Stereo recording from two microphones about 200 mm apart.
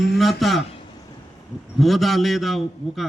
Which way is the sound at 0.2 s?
Centre (ahead or behind).